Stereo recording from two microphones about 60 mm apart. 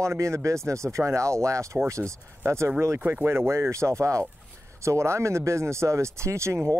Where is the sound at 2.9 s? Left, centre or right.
Right.